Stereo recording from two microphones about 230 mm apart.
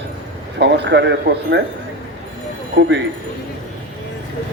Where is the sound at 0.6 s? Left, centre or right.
Right.